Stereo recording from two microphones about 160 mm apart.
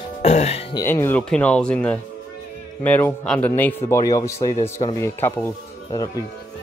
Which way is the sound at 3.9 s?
20° left (ahead or behind).